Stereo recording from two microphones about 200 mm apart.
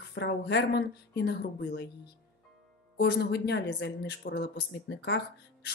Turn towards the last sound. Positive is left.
turn(degrees=55)  # may be behind; listen again after turning